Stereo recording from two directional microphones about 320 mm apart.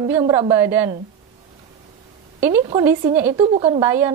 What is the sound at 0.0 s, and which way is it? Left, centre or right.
Speech, centre.